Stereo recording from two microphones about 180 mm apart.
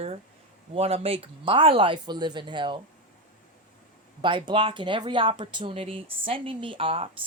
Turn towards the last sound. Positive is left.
turn(degrees=-30)  # may be behind; listen again after turning